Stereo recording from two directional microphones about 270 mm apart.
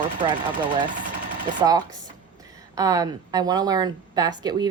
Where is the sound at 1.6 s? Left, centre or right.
Centre.